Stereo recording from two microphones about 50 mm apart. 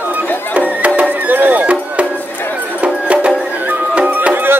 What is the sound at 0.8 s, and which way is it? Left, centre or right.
Music, right.